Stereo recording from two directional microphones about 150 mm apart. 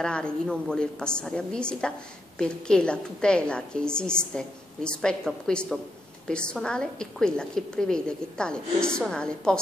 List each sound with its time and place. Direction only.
0.0 s a woman's voice: 5° left (ahead or behind)